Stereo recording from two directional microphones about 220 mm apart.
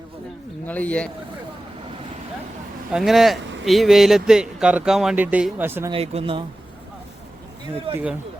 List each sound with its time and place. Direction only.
0.7 s speech: 5° left (ahead or behind)
2.9 s speech: centre (ahead or behind)
5.9 s speech: 25° right (ahead or behind)